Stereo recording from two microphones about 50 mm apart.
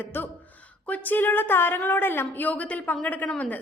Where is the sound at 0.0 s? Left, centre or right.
Left.